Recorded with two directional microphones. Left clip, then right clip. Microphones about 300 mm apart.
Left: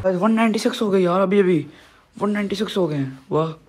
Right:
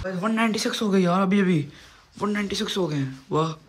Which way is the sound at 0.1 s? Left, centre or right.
Centre.